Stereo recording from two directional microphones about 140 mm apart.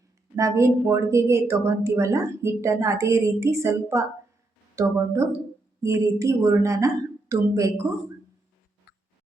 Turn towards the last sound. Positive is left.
turn(degrees=-20)  # may be behind; listen again after turning